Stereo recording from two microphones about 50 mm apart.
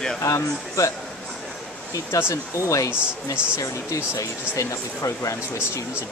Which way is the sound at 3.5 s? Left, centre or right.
Left.